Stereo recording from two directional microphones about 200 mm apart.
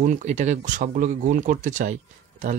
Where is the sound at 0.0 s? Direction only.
35° right (ahead or behind).